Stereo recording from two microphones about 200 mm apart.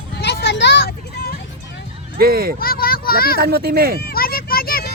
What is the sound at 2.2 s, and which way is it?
Speech, 50° right (ahead or behind).